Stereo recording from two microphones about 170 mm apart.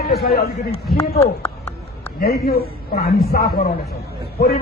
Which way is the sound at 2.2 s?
65° left (ahead or behind).